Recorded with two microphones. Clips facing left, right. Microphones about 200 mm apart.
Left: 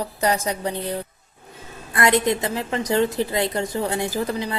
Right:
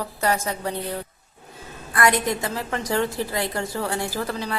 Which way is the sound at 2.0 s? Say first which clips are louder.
Left 2 dB; 20° left (ahead or behind).